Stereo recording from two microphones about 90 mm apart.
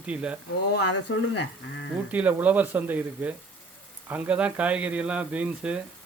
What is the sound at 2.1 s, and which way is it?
Speech, 15° right (ahead or behind).